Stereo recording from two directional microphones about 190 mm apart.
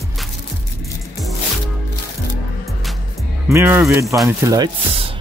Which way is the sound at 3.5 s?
15° right (ahead or behind).